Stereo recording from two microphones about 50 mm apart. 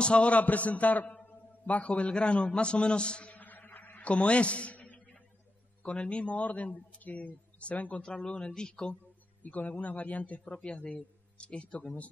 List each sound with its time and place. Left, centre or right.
0.0 s a man's voice: left
4.1 s a man's voice: left
8.0 s speech: centre
9.4 s a man's voice: left